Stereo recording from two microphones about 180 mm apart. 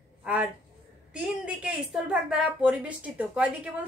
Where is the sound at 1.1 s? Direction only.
5° right (ahead or behind).